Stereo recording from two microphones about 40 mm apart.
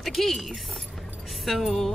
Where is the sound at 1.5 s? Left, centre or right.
Centre.